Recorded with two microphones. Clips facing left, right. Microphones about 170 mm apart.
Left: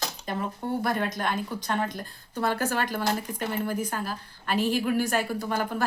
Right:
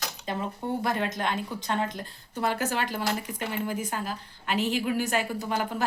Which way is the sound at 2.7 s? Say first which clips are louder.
Left 2 dB; 45° left (ahead or behind).